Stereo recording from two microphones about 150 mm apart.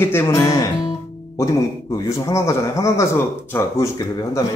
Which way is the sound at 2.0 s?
20° left (ahead or behind).